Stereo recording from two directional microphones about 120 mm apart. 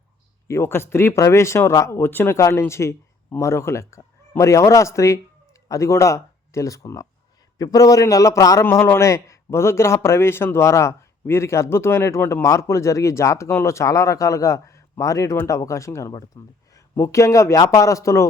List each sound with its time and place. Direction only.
0.4 s a man's voice: 20° left (ahead or behind)